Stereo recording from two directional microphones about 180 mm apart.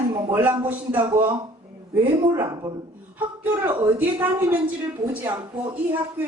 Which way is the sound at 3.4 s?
10° right (ahead or behind).